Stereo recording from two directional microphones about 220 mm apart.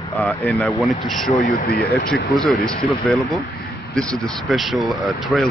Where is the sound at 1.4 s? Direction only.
40° left (ahead or behind).